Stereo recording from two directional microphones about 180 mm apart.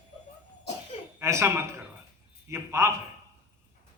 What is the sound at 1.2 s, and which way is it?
A man's voice, 15° right (ahead or behind).